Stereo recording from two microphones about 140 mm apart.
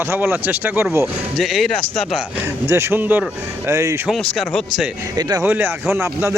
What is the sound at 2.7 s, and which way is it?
Speech, 15° right (ahead or behind).